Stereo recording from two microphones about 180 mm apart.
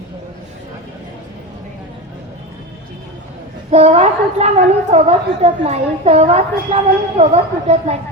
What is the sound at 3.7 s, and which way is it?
A woman's voice, 35° right (ahead or behind).